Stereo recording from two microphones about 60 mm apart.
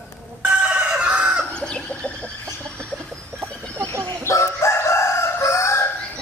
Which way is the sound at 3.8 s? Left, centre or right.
Right.